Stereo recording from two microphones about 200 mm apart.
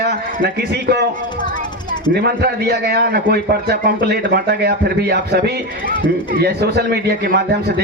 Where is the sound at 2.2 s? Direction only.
55° right (ahead or behind).